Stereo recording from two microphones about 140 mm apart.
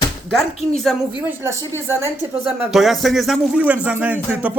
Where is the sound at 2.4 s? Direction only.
5° right (ahead or behind).